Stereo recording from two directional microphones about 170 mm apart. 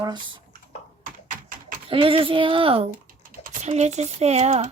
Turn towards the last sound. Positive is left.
turn(degrees=-40)  # may be behind; listen again after turning